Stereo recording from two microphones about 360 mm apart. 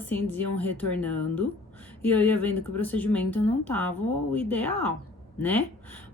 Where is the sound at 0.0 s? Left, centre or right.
Centre.